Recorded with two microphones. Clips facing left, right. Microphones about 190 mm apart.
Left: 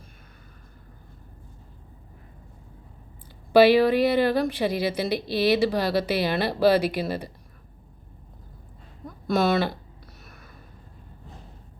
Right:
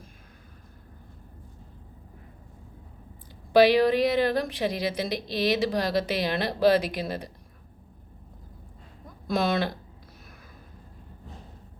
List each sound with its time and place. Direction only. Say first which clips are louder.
3.5 s speech: left 2 dB; 5° left (ahead or behind)
9.2 s speech: left 3 dB; centre (ahead or behind)